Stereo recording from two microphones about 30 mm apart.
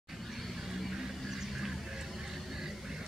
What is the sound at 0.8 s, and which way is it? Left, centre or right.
Music, centre.